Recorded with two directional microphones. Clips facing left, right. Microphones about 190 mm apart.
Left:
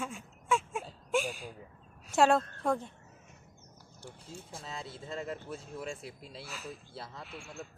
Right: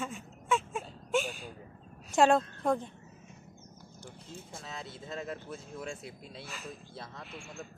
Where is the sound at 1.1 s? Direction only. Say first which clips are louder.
Even; centre (ahead or behind).